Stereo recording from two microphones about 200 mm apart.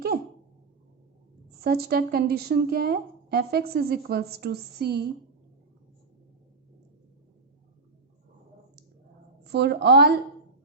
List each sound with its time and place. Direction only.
1.5 s speech: 50° right (ahead or behind)
9.4 s a woman's voice: 55° right (ahead or behind)